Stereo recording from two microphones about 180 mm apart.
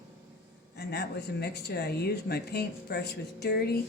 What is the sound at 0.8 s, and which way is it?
Speech, 65° left (ahead or behind).